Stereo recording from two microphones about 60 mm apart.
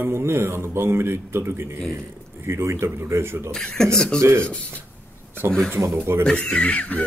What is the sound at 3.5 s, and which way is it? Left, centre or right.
Speech, centre.